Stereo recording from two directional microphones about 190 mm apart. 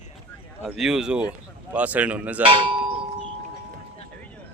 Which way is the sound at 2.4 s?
25° right (ahead or behind).